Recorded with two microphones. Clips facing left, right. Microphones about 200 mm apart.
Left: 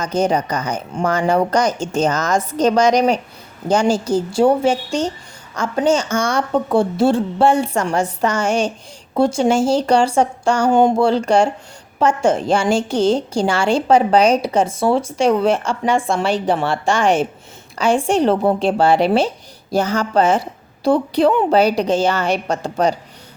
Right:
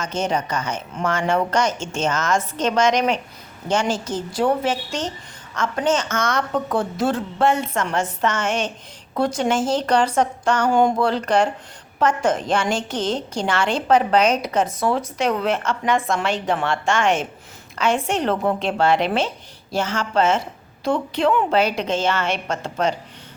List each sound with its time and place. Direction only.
0.0 s a woman's voice: 35° left (ahead or behind)
10.6 s a woman's voice: 20° left (ahead or behind)
10.8 s a woman's voice: 30° left (ahead or behind)